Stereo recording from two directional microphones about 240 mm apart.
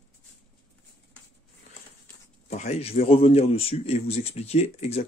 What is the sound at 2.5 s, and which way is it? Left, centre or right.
Speech, left.